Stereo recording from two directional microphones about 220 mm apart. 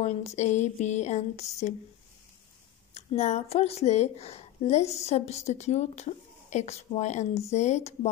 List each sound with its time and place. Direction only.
0.0 s speech: 30° left (ahead or behind)
2.9 s a woman's voice: 30° left (ahead or behind)